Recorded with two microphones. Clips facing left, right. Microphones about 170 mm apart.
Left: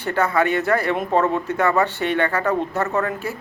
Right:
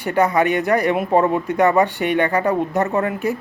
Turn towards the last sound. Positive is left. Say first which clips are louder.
# right 3 dB
turn(degrees=-15)  # may be behind; listen again after turning